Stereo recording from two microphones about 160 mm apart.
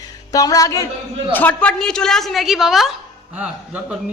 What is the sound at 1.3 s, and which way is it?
A woman's voice, 10° left (ahead or behind).